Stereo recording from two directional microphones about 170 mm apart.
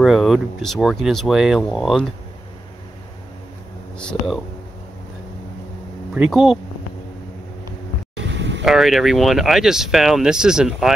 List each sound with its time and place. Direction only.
0.0 s speech: centre (ahead or behind)
4.0 s speech: 5° left (ahead or behind)
6.1 s speech: centre (ahead or behind)
8.2 s vehicle: 90° right
8.6 s speech: centre (ahead or behind)